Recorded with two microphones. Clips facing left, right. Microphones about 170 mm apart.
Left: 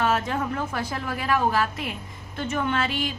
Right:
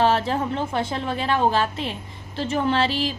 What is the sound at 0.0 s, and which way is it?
A woman's voice, 30° right (ahead or behind).